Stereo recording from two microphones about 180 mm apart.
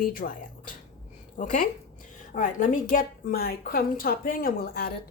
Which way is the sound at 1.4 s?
45° left (ahead or behind).